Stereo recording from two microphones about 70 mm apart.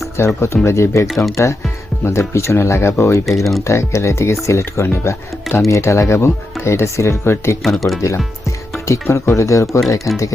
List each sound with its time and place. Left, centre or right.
0.3 s speech: left
1.0 s speech: centre
2.0 s speech: left
3.2 s speech: centre
3.6 s speech: left
7.6 s speech: centre
8.9 s speech: left